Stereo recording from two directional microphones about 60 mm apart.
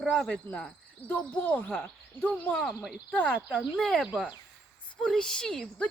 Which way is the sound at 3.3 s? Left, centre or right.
Right.